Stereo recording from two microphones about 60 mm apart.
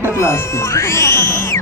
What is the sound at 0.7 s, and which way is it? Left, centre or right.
Music, left.